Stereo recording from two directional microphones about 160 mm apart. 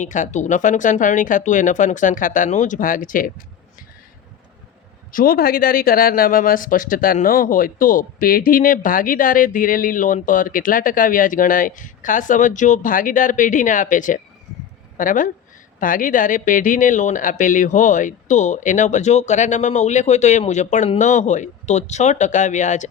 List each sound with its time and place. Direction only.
0.0 s speech: 50° left (ahead or behind)
5.1 s speech: 65° left (ahead or behind)